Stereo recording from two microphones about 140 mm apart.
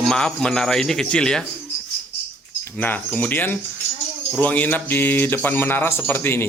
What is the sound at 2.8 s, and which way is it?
Speech, 10° left (ahead or behind).